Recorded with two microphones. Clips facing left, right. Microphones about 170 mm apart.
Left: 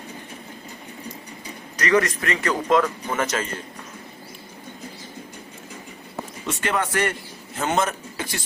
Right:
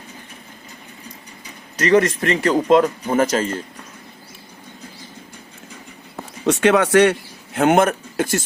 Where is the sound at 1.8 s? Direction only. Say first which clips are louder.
Right 5 dB; 25° right (ahead or behind).